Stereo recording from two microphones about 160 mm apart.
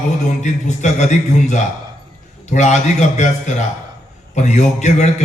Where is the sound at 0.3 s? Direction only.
50° left (ahead or behind).